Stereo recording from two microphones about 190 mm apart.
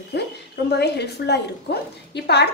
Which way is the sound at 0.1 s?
60° left (ahead or behind).